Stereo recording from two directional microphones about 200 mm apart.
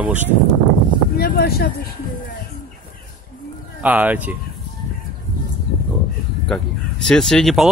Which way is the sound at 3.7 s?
5° right (ahead or behind).